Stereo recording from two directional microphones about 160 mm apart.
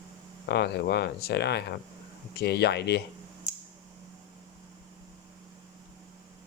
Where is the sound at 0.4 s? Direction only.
90° left.